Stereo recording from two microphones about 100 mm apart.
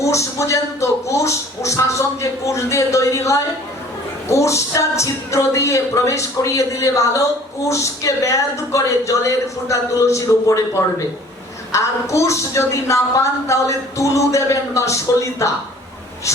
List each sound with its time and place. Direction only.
0.0 s a woman's voice: 30° left (ahead or behind)